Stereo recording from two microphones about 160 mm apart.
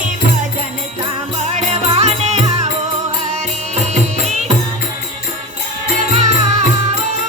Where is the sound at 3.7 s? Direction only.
45° right (ahead or behind).